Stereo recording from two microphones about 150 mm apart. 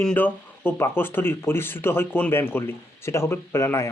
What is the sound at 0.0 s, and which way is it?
Speech, 10° left (ahead or behind).